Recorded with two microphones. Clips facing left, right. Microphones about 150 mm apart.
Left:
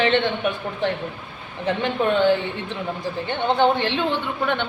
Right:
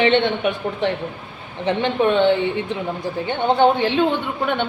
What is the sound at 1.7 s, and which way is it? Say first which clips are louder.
A woman's voice: right 3 dB; 20° right (ahead or behind).